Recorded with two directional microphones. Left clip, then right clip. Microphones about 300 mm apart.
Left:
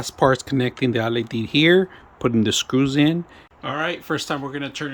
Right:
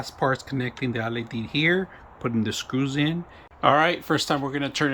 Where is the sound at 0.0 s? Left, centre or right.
Left.